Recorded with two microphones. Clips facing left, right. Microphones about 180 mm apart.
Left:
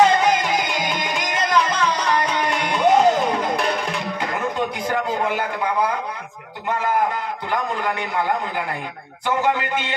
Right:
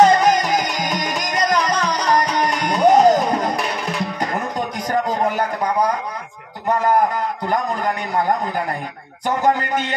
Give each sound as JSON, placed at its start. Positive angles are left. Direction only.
{"t": 0.0, "sound": "music", "side_deg": -40}
{"t": 5.2, "sound": "a sound", "side_deg": -40}
{"t": 6.7, "sound": "a man's voice", "side_deg": -40}
{"t": 9.4, "sound": "a man's voice", "side_deg": -40}